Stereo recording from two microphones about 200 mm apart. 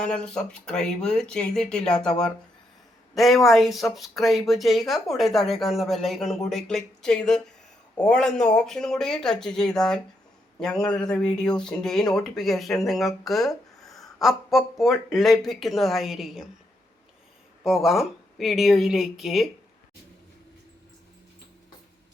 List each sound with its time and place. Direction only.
0.0 s speech: 5° left (ahead or behind)
17.6 s speech: centre (ahead or behind)